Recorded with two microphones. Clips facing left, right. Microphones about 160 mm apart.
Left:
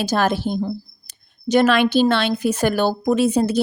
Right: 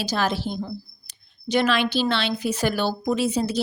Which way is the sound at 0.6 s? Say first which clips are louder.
Left 7 dB; 40° left (ahead or behind).